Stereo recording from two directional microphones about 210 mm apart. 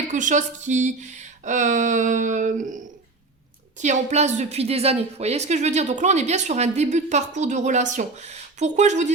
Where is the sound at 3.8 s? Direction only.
35° right (ahead or behind).